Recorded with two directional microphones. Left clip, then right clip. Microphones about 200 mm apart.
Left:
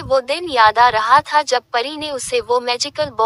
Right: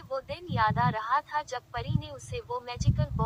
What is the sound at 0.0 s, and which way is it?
Speech, 50° left (ahead or behind).